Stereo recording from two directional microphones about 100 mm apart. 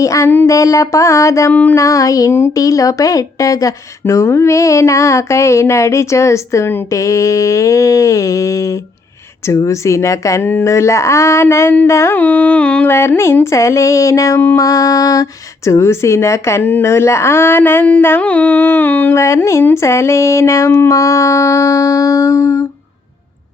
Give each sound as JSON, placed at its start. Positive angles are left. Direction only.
{"t": 0.0, "sound": "speech", "side_deg": 30}
{"t": 12.1, "sound": "music", "side_deg": 15}
{"t": 12.9, "sound": "speech", "side_deg": 25}
{"t": 18.2, "sound": "music", "side_deg": 15}
{"t": 19.1, "sound": "speech", "side_deg": 30}